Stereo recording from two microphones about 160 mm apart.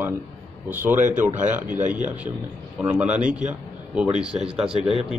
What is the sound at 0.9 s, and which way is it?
Speech, 50° right (ahead or behind).